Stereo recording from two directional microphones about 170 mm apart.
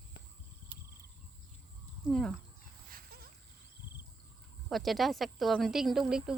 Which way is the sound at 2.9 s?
60° right (ahead or behind).